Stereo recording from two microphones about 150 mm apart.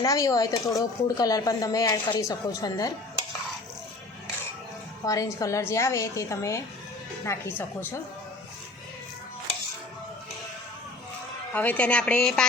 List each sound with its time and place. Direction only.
0.0 s a woman's voice: 20° left (ahead or behind)
5.0 s a woman's voice: 20° left (ahead or behind)
11.5 s a woman's voice: 10° left (ahead or behind)